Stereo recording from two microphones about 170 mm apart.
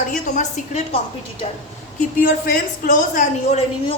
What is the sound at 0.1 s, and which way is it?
Speech, 45° left (ahead or behind).